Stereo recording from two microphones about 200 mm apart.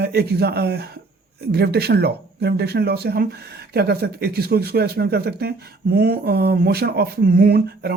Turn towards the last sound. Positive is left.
turn(degrees=-50)  # may be behind; listen again after turning